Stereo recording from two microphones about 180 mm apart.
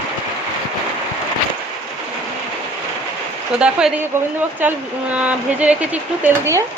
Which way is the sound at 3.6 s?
5° right (ahead or behind).